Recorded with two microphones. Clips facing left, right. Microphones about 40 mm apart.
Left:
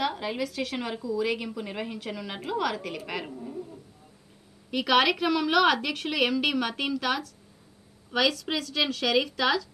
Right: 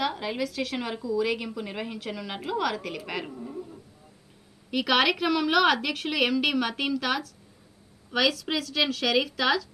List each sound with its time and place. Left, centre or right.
0.0 s a woman's voice: centre
4.6 s a woman's voice: centre